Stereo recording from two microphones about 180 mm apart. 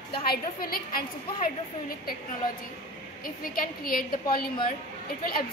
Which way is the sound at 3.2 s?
55° left (ahead or behind).